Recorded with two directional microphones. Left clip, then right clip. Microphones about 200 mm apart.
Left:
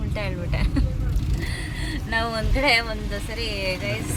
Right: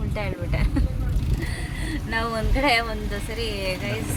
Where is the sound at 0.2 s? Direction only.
5° right (ahead or behind).